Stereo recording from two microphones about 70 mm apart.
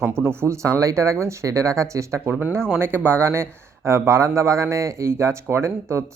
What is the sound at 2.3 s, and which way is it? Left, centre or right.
Speech, right.